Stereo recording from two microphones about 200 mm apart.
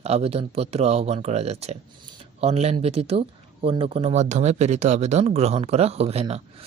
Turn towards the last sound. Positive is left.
turn(degrees=-30)  # may be behind; listen again after turning